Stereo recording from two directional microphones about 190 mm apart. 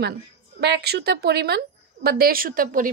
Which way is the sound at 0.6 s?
60° right (ahead or behind).